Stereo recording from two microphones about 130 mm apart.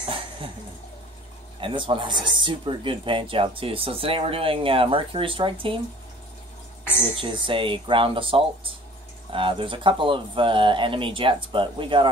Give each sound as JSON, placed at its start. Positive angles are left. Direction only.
{"t": 1.6, "sound": "speech", "side_deg": -40}
{"t": 7.2, "sound": "speech", "side_deg": -40}